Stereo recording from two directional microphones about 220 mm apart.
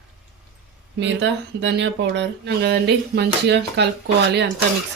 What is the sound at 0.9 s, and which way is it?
Speech, 50° right (ahead or behind).